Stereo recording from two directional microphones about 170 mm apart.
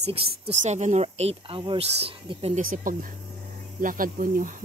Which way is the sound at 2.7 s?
55° right (ahead or behind).